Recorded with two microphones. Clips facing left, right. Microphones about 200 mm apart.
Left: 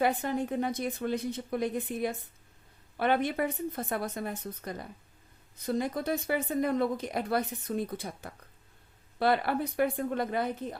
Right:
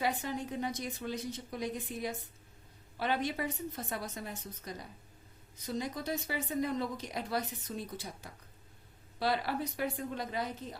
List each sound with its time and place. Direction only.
0.0 s a woman's voice: 55° left (ahead or behind)